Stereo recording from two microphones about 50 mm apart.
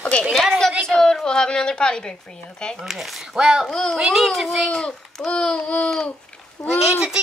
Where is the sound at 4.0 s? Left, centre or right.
Centre.